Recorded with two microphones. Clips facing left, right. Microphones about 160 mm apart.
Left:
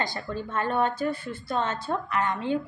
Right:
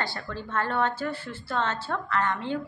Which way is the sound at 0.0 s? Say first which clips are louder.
Left 2 dB; 15° left (ahead or behind).